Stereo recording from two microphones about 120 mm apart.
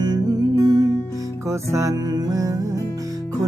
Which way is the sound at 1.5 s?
25° right (ahead or behind).